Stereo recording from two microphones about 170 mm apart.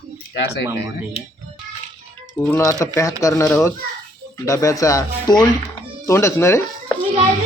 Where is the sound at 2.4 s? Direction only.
15° left (ahead or behind).